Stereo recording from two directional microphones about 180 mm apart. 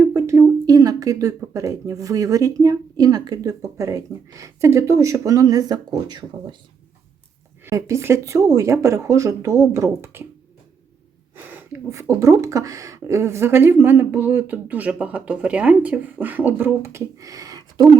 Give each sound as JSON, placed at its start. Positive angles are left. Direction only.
{"t": 0.0, "sound": "speech", "side_deg": -15}
{"t": 7.6, "sound": "a woman's voice", "side_deg": -15}
{"t": 11.7, "sound": "a woman's voice", "side_deg": -15}